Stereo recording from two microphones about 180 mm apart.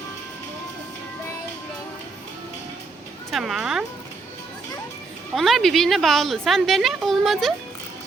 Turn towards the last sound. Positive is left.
turn(degrees=0)  # may be behind; listen again after turning